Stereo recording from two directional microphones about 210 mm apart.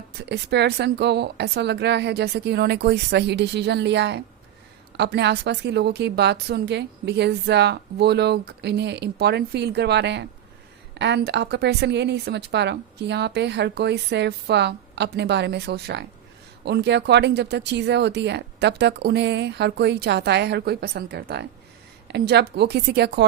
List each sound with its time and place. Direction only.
0.1 s a woman's voice: 50° right (ahead or behind)